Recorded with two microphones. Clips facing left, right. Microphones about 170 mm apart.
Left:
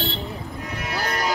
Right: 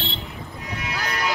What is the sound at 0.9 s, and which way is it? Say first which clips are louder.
Music: left 2 dB; 40° left (ahead or behind).